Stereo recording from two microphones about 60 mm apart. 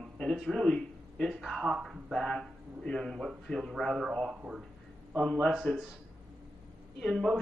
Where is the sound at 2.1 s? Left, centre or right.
Centre.